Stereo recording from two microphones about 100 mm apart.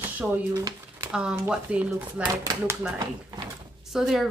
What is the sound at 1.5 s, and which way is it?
Speech, 10° right (ahead or behind).